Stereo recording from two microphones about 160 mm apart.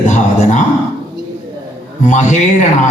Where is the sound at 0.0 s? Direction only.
50° left (ahead or behind).